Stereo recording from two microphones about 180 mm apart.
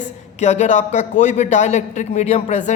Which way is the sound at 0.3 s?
40° left (ahead or behind).